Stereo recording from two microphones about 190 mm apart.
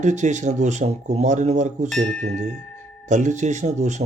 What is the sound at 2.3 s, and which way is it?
Speech, 40° right (ahead or behind).